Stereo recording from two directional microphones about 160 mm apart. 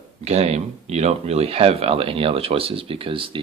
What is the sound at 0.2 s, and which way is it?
Speech, 40° right (ahead or behind).